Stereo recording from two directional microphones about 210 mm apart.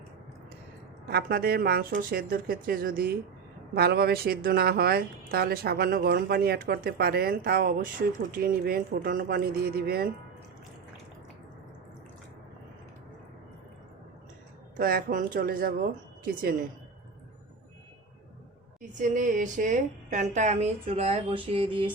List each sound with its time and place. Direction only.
1.0 s speech: 50° right (ahead or behind)
14.8 s speech: 45° right (ahead or behind)
18.8 s a woman's voice: 35° right (ahead or behind)